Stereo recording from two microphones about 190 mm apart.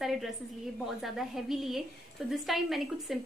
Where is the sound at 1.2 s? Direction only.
Centre (ahead or behind).